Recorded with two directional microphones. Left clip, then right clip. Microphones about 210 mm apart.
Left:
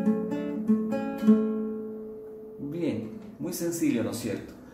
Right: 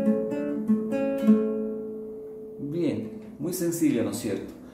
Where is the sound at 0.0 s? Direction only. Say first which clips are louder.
Right 3 dB; 20° left (ahead or behind).